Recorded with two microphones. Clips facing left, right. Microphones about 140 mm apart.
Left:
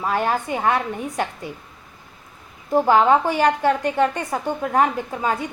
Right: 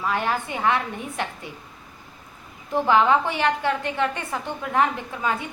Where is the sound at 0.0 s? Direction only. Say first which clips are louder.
Left 3 dB; 40° left (ahead or behind).